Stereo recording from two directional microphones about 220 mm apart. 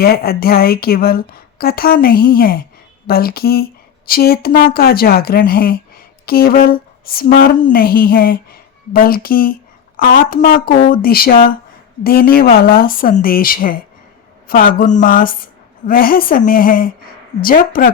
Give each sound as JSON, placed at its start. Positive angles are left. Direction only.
{"t": 0.0, "sound": "speech", "side_deg": 45}